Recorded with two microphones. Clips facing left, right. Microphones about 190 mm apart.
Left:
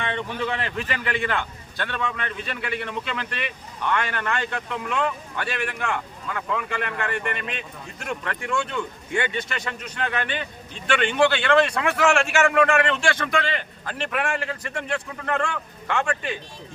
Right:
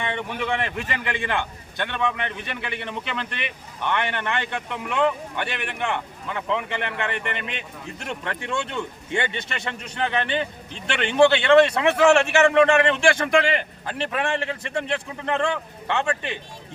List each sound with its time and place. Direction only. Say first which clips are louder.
0.0 s a man's voice: even; 15° right (ahead or behind)